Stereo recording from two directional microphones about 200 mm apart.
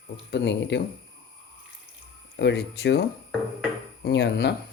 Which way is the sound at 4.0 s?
55° left (ahead or behind).